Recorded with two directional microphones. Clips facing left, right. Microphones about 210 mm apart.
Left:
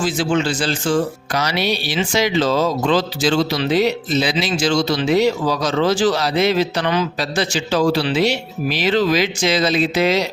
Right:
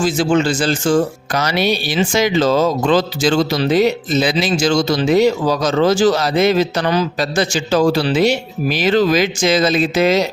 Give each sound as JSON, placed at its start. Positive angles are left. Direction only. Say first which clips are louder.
{"t": 0.0, "sound": "speech", "louder": "right 4 dB", "side_deg": -45}